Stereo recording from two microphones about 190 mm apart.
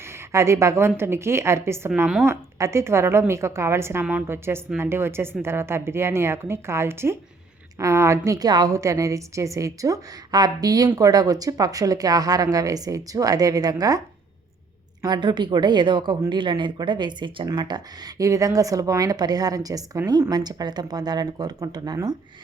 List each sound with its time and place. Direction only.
0.3 s a woman's voice: 15° right (ahead or behind)
1.9 s a woman's voice: 5° right (ahead or behind); by 14.0 s 20° right (ahead or behind)
15.0 s a woman's voice: 25° right (ahead or behind)